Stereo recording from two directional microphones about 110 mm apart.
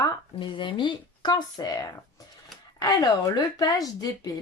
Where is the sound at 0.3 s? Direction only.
50° left (ahead or behind).